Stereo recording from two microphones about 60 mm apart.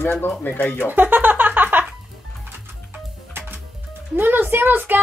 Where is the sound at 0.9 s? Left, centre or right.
Right.